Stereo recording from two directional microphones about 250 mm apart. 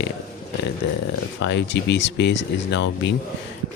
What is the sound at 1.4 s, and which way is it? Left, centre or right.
Speech, left.